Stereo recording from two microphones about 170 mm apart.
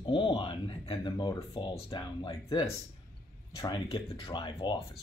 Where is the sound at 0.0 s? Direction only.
30° left (ahead or behind).